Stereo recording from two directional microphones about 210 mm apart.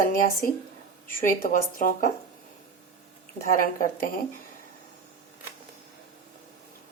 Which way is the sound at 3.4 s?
40° left (ahead or behind).